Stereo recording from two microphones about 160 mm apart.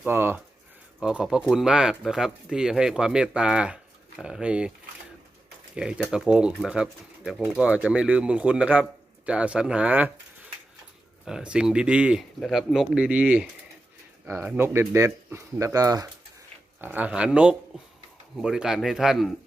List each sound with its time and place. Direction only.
0.0 s speech: 15° right (ahead or behind)
5.7 s speech: 5° right (ahead or behind)
11.3 s speech: 5° right (ahead or behind); by 16.0 s 20° right (ahead or behind)
16.8 s speech: 10° right (ahead or behind)